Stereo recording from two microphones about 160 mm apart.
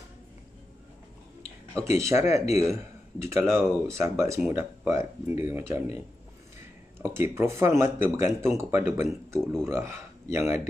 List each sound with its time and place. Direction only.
2.0 s speech: 20° right (ahead or behind)
2.4 s a man's voice: 45° left (ahead or behind)
2.7 s speech: 15° right (ahead or behind)
7.0 s speech: 15° right (ahead or behind)